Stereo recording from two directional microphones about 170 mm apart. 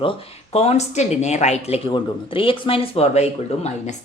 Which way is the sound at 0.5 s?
40° left (ahead or behind).